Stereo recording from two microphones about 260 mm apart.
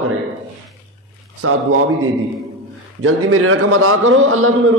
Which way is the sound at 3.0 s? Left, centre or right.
Right.